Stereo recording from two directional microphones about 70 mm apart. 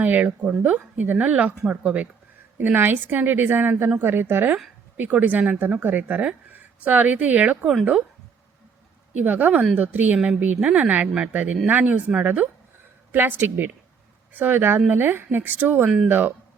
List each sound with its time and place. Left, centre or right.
0.0 s speech: right
9.1 s a woman's voice: right